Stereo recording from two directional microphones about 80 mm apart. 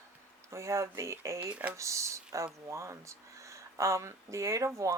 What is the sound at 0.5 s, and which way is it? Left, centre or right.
Speech, right.